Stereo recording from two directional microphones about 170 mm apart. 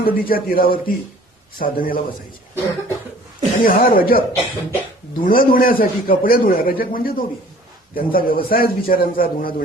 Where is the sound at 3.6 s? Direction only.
60° left (ahead or behind).